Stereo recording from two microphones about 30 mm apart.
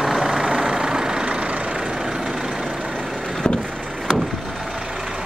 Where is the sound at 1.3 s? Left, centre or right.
Right.